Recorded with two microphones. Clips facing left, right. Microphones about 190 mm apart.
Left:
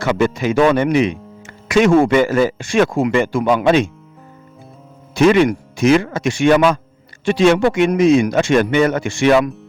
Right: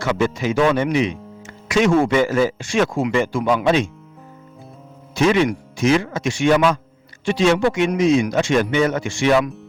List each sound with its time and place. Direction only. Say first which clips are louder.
0.0 s speech: left 3 dB; 55° left (ahead or behind)
5.1 s speech: left 5 dB; 60° left (ahead or behind)